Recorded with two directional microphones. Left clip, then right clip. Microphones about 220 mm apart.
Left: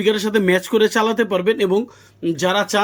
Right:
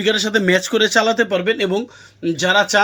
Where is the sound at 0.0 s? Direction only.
10° left (ahead or behind).